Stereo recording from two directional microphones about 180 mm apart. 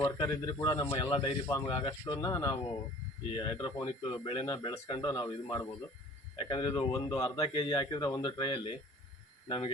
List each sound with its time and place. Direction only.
0.0 s speech: 20° left (ahead or behind)